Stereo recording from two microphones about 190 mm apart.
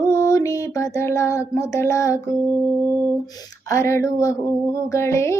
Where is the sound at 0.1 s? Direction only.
15° left (ahead or behind).